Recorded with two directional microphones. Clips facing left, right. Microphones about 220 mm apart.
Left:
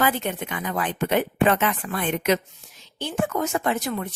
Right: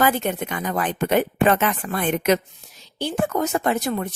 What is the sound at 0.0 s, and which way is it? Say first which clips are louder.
A woman's voice: right 3 dB; 45° right (ahead or behind).